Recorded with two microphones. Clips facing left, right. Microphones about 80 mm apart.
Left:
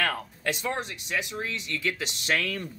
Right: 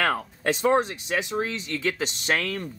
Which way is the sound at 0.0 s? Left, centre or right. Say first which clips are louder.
Right 4 dB; right.